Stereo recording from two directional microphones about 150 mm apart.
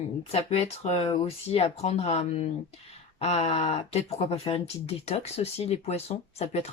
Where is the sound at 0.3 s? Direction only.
45° left (ahead or behind).